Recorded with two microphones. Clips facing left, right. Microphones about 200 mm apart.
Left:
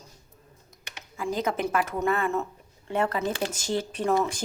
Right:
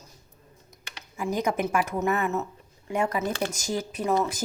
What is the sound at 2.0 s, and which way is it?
Speech, 20° right (ahead or behind).